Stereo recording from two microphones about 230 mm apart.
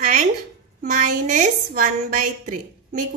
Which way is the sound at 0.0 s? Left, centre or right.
Right.